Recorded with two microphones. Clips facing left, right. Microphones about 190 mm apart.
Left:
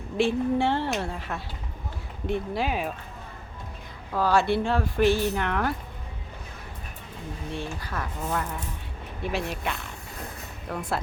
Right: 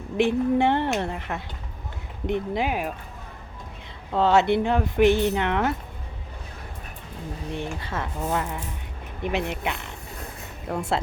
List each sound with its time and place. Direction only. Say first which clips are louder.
0.2 s speech: right 3 dB; 20° right (ahead or behind)
4.1 s speech: right 3 dB; 25° right (ahead or behind)
7.5 s speech: right 3 dB; 20° right (ahead or behind)